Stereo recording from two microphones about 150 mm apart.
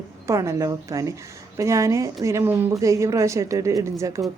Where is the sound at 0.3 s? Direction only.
20° right (ahead or behind).